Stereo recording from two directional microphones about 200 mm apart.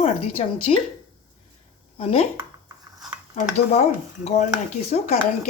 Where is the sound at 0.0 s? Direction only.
30° left (ahead or behind).